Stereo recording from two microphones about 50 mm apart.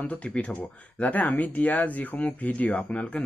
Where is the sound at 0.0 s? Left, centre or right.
Left.